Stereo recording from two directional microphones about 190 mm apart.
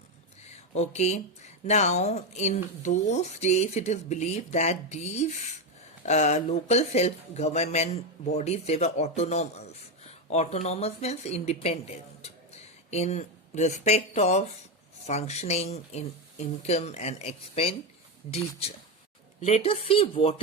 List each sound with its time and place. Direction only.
0.7 s speech: 35° left (ahead or behind)